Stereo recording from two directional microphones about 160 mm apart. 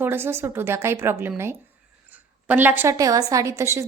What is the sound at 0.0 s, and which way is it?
A woman's voice, 15° right (ahead or behind).